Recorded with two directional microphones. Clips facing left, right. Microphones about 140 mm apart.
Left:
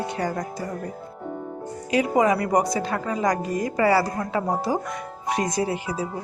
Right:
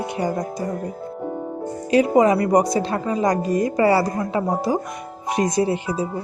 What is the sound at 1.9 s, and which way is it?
A woman's voice, 30° right (ahead or behind).